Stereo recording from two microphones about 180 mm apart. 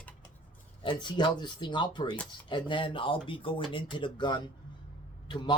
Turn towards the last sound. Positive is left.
turn(degrees=25)  # may be behind; listen again after turning